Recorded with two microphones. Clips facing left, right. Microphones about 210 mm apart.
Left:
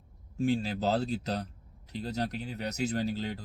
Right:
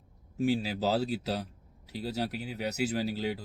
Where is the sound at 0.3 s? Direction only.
5° right (ahead or behind).